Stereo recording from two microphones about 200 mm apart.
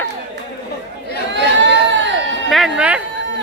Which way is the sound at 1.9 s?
65° right (ahead or behind).